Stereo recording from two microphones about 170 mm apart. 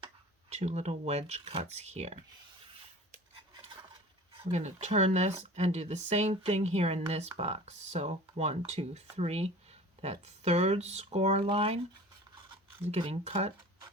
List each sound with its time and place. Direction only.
0.5 s speech: 40° right (ahead or behind)
4.5 s speech: 40° right (ahead or behind)
12.9 s speech: 35° right (ahead or behind)